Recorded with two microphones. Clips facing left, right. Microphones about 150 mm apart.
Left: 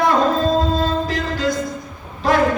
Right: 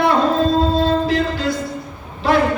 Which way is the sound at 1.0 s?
40° left (ahead or behind).